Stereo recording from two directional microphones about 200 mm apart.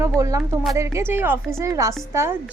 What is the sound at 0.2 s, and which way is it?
A woman's voice, 15° right (ahead or behind).